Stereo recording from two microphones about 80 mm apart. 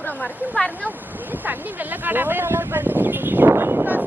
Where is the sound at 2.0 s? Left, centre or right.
Right.